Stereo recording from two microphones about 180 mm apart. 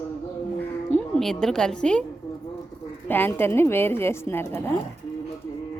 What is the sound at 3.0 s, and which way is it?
A woman's voice, 10° left (ahead or behind).